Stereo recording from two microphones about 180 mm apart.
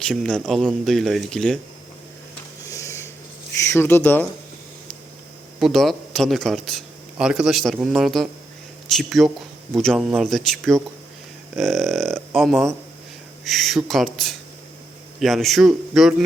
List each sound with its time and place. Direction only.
0.0 s a man's voice: 5° left (ahead or behind)
2.6 s a sound: 15° left (ahead or behind)
3.6 s speech: 15° left (ahead or behind)
5.5 s a man's voice: centre (ahead or behind)